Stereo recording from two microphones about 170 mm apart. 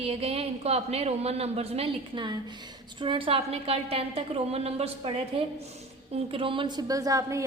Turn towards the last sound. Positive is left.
turn(degrees=-20)  # may be behind; listen again after turning